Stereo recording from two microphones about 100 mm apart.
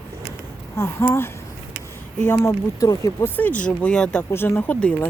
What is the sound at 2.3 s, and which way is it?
Speech, 35° left (ahead or behind).